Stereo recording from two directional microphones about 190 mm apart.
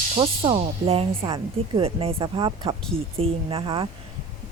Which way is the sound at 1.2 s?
20° right (ahead or behind).